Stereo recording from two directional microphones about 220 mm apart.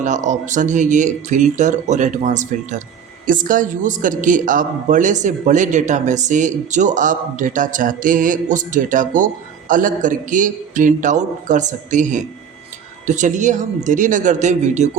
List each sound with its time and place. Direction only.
0.0 s a man's voice: 35° right (ahead or behind)